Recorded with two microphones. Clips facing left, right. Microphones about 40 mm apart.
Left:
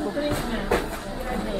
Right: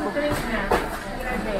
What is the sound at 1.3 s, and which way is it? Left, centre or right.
Run, right.